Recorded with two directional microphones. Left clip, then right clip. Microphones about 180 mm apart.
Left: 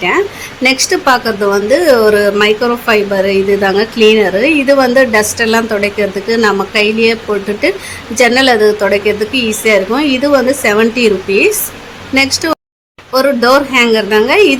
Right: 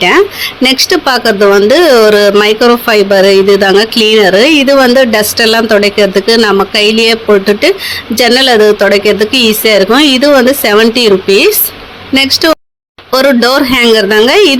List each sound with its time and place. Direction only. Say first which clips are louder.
0.0 s speech: right 6 dB; 25° right (ahead or behind)